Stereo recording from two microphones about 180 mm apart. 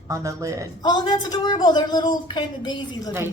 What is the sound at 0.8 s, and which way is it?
Speech, 25° left (ahead or behind).